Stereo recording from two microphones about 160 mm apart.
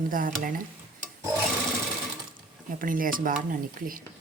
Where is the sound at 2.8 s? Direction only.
60° right (ahead or behind).